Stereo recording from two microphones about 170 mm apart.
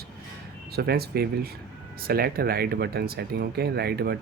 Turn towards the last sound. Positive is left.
turn(degrees=-70)  # may be behind; listen again after turning